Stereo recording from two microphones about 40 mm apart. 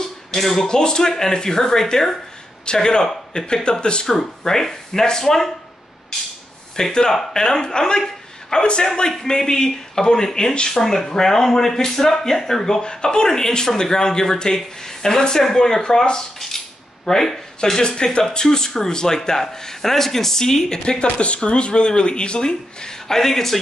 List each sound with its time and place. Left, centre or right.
0.4 s speech: centre
0.7 s speech: centre
6.8 s a man's voice: centre
16.3 s cutlery: centre
17.6 s speech: centre